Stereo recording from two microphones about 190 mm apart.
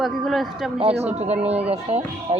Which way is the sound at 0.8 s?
35° right (ahead or behind).